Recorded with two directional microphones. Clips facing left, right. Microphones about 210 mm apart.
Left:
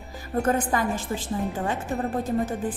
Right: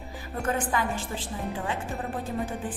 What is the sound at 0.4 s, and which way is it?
Speech, 40° left (ahead or behind).